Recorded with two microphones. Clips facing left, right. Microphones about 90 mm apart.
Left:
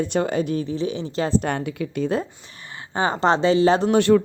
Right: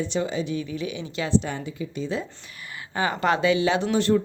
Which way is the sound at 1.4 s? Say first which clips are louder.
Left 6 dB; 65° left (ahead or behind).